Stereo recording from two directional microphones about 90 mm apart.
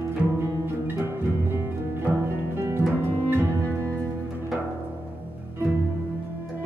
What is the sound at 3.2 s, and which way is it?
Double bass, 25° right (ahead or behind).